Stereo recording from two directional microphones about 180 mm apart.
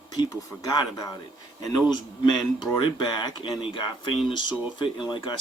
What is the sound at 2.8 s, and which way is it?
Speech, 25° left (ahead or behind).